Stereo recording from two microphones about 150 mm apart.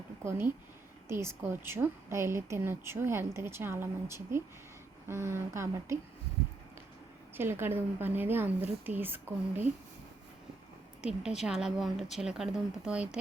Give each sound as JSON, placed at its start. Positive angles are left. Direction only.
{"t": 0.3, "sound": "a woman's voice", "side_deg": -15}
{"t": 7.3, "sound": "a woman's voice", "side_deg": -15}
{"t": 11.0, "sound": "a woman's voice", "side_deg": -5}